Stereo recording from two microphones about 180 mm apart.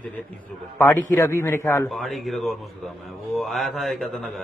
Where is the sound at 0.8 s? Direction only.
15° left (ahead or behind).